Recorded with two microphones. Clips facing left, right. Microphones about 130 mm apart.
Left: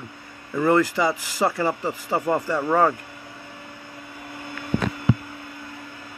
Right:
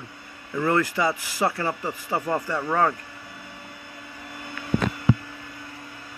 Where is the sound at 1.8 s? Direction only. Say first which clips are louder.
Left 3 dB; 20° left (ahead or behind).